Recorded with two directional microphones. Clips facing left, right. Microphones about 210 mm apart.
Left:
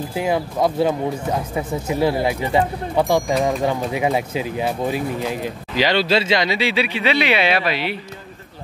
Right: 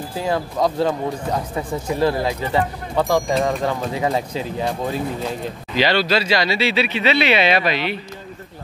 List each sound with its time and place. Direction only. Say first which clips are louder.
0.1 s speech: left 1 dB; 15° left (ahead or behind)